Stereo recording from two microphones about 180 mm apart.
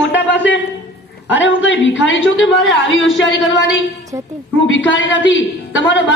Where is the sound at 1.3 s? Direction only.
90° left.